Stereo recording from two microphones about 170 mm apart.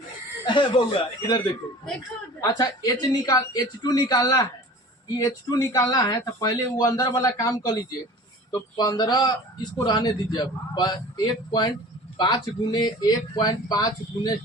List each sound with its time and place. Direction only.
0.4 s speech: 30° left (ahead or behind)
2.4 s speech: 25° left (ahead or behind)